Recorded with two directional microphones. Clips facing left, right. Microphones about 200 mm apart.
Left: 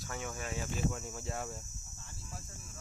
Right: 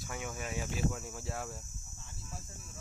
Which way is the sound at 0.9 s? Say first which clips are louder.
Even; centre (ahead or behind).